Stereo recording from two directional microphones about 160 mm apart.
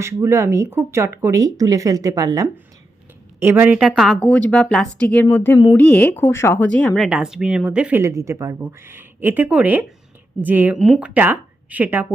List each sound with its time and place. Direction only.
0.0 s a woman's voice: 15° right (ahead or behind)